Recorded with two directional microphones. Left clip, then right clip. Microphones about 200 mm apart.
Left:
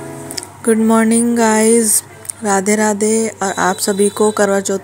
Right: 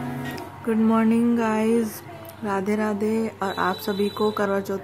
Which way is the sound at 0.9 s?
25° left (ahead or behind).